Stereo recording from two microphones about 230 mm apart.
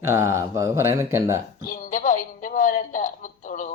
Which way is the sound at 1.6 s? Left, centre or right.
Left.